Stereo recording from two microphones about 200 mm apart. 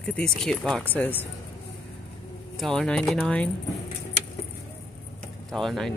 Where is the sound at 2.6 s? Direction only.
Centre (ahead or behind).